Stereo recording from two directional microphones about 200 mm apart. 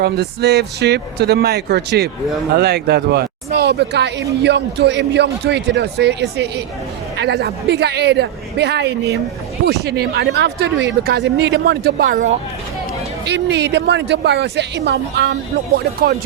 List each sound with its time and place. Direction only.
0.0 s speech: 55° right (ahead or behind)
13.2 s speech: 60° right (ahead or behind)